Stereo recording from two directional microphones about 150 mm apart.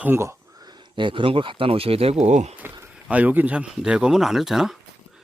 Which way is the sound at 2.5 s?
10° right (ahead or behind).